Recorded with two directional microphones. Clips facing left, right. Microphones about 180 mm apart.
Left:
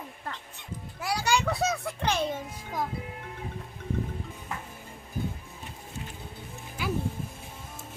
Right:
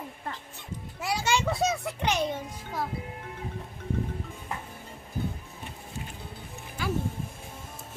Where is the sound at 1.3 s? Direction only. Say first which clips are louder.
Even; centre (ahead or behind).